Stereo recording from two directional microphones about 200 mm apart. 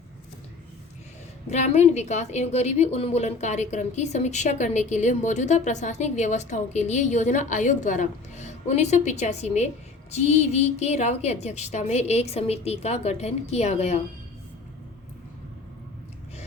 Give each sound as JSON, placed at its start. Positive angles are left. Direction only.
{"t": 1.5, "sound": "a woman's voice", "side_deg": 35}